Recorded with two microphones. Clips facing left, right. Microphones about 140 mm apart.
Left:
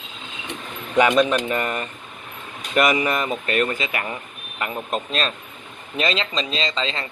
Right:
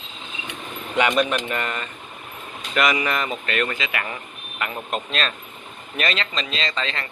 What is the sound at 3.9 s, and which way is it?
Speech, 25° left (ahead or behind).